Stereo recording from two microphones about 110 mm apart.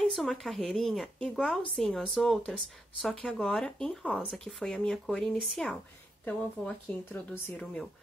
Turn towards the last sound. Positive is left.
turn(degrees=10)  # may be behind; listen again after turning